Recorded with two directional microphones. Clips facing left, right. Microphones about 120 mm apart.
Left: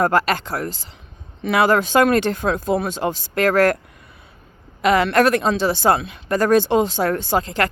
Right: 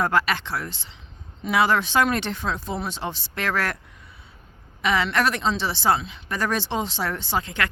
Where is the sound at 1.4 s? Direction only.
60° left (ahead or behind); by 3.8 s 45° left (ahead or behind).